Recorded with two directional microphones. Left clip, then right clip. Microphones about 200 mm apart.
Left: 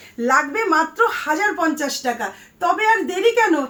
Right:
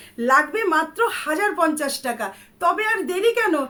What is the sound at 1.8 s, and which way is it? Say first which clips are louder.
Speech: left 3 dB; 15° right (ahead or behind).